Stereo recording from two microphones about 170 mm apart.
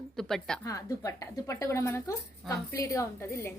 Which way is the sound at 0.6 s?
20° left (ahead or behind).